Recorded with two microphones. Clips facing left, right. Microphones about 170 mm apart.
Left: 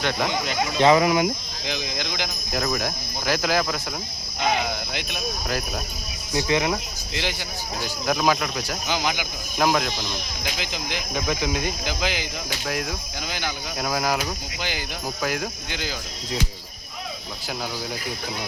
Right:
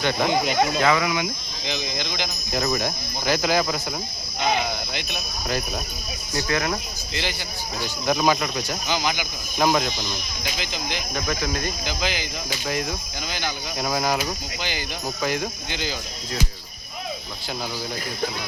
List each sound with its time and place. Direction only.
0.0 s speech: centre (ahead or behind)
0.8 s speech: 30° left (ahead or behind)
1.6 s cricket: 10° left (ahead or behind)
2.5 s speech: centre (ahead or behind)
4.9 s cricket: 5° left (ahead or behind)
6.3 s cricket: 20° left (ahead or behind)
7.8 s speech: centre (ahead or behind)
8.9 s cricket: 10° left (ahead or behind)
9.6 s speech: centre (ahead or behind)
10.9 s cricket: 15° left (ahead or behind)
13.3 s speech: 5° left (ahead or behind)